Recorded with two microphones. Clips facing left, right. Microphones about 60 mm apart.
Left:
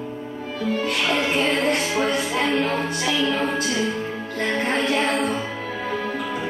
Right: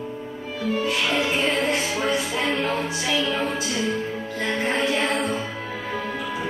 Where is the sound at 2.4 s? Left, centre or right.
Left.